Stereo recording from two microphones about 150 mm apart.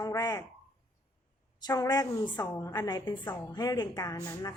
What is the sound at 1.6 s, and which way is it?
A woman's voice, 25° left (ahead or behind).